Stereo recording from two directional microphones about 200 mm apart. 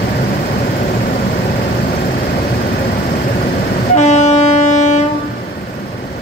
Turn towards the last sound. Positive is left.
turn(degrees=35)  # may be behind; listen again after turning